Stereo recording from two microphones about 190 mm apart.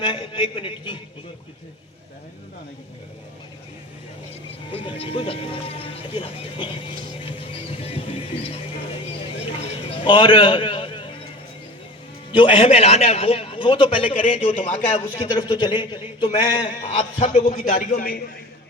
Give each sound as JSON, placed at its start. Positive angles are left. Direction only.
{"t": 0.0, "sound": "a man's voice", "side_deg": 25}
{"t": 4.7, "sound": "a man's voice", "side_deg": 30}
{"t": 7.3, "sound": "music", "side_deg": 30}
{"t": 9.6, "sound": "a sound", "side_deg": 25}
{"t": 12.3, "sound": "a man's voice", "side_deg": 25}
{"t": 14.7, "sound": "a man's voice", "side_deg": 40}
{"t": 15.3, "sound": "a man's voice", "side_deg": 25}
{"t": 17.2, "sound": "a man's voice", "side_deg": 40}